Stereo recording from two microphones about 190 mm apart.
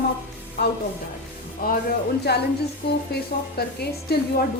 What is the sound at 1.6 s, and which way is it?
Speech, 50° left (ahead or behind).